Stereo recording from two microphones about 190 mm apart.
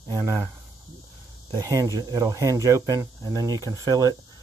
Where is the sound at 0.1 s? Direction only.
15° right (ahead or behind).